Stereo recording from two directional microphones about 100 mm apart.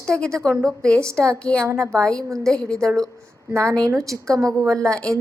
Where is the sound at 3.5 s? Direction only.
30° right (ahead or behind).